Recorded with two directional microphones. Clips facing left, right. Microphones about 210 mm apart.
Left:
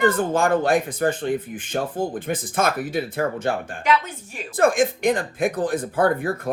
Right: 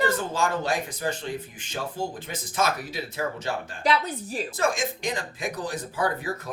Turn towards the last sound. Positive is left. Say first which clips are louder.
# left 7 dB
turn(degrees=55)  # may be behind; listen again after turning